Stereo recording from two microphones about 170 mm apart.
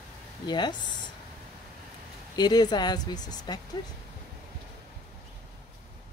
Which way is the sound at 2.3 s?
25° left (ahead or behind).